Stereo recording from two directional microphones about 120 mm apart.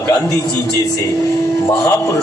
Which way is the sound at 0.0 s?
25° left (ahead or behind).